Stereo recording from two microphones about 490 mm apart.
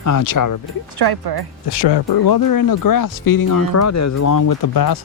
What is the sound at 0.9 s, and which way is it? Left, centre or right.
Speech, right.